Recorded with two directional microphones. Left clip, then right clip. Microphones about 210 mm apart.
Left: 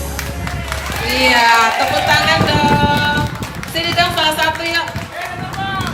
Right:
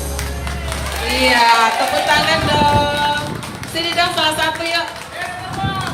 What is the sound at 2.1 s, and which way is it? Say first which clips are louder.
Music: left 2 dB; 45° left (ahead or behind).